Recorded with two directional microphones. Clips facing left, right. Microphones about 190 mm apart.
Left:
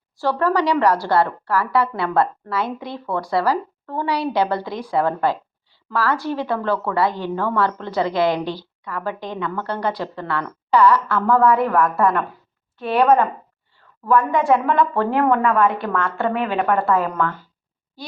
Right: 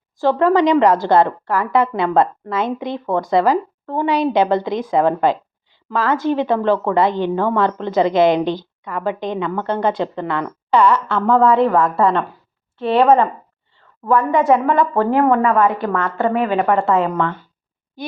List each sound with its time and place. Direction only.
0.2 s a woman's voice: 20° right (ahead or behind)
14.5 s a woman's voice: 5° right (ahead or behind)
16.7 s a woman's voice: 25° right (ahead or behind)
18.0 s a sound: 20° right (ahead or behind)